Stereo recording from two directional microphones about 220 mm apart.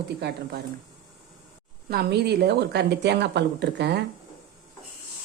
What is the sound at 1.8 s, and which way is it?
Speech, 45° right (ahead or behind).